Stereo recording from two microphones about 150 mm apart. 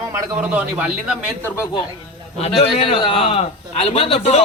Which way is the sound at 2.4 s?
40° left (ahead or behind).